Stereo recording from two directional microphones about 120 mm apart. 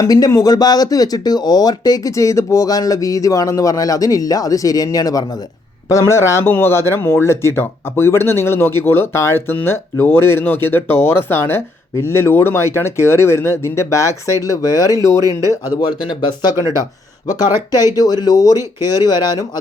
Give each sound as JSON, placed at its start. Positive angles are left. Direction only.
{"t": 0.0, "sound": "speech", "side_deg": 25}
{"t": 15.2, "sound": "speech", "side_deg": -30}
{"t": 15.6, "sound": "speech", "side_deg": 30}